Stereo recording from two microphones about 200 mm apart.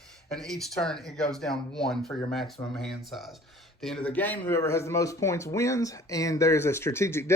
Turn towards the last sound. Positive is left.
turn(degrees=15)  # may be behind; listen again after turning